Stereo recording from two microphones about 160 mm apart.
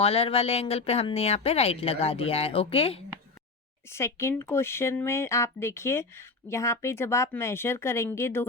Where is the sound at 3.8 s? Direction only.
15° left (ahead or behind).